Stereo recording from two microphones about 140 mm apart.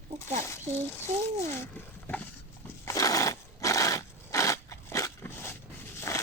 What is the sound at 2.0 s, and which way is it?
Horse, 10° left (ahead or behind).